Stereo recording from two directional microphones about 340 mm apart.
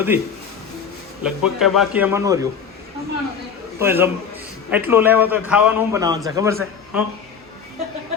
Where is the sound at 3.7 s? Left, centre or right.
Centre.